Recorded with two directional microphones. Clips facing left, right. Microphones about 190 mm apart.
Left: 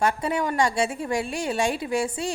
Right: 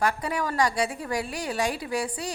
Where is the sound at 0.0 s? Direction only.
25° left (ahead or behind).